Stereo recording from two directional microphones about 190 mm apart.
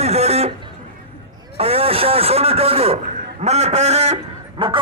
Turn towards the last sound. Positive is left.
turn(degrees=-25)  # may be behind; listen again after turning